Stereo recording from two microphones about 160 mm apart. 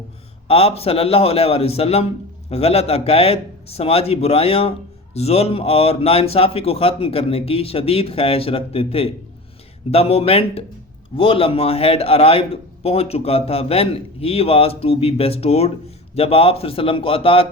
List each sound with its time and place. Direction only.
0.4 s a man's voice: 35° left (ahead or behind)